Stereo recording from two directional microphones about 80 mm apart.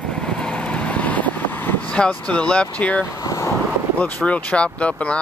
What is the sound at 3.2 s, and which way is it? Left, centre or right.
Vehicle, left.